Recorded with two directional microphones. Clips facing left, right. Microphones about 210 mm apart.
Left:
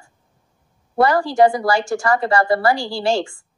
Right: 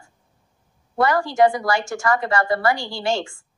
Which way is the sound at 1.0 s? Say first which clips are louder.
Left 3 dB; 30° left (ahead or behind).